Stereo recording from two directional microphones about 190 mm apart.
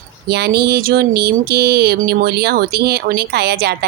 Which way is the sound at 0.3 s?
60° right (ahead or behind).